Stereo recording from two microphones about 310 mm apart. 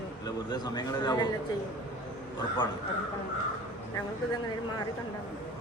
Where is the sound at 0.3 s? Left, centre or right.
Centre.